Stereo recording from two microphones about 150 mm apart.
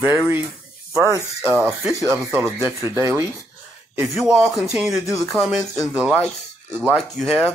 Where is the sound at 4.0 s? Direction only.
5° right (ahead or behind).